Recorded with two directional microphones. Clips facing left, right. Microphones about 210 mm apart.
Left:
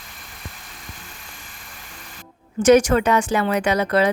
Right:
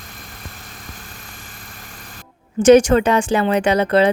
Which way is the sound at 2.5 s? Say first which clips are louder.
Right 4 dB; 30° right (ahead or behind).